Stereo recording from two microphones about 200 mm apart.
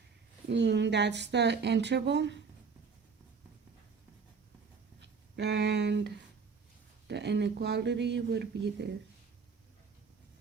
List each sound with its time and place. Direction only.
0.4 s speech: 60° right (ahead or behind)
4.9 s speech: 60° right (ahead or behind)
7.1 s speech: 60° right (ahead or behind)